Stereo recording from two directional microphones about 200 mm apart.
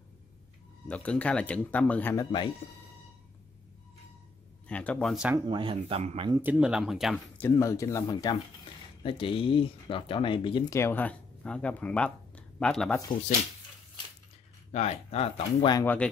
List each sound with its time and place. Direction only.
0.8 s speech: 5° left (ahead or behind)
2.6 s speech: 30° left (ahead or behind)
4.6 s speech: 5° left (ahead or behind)
5.3 s speech: 25° right (ahead or behind)
6.3 s speech: 5° right (ahead or behind)
7.3 s speech: 10° left (ahead or behind)
14.7 s speech: 35° left (ahead or behind)
15.8 s speech: 10° left (ahead or behind)